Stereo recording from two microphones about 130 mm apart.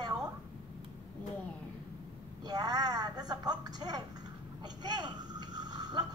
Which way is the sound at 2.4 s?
30° right (ahead or behind).